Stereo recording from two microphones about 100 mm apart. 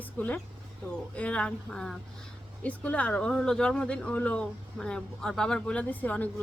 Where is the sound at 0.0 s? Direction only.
15° left (ahead or behind).